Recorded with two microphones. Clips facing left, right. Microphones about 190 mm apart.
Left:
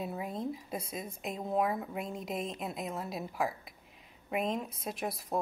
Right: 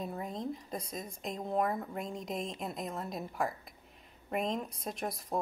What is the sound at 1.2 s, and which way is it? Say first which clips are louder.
Speech: left 1 dB; 5° left (ahead or behind).